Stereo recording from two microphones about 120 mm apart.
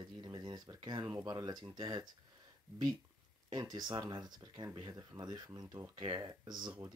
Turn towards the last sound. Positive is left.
turn(degrees=-35)  # may be behind; listen again after turning